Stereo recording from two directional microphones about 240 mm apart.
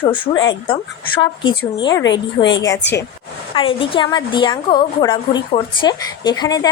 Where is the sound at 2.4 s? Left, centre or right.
Left.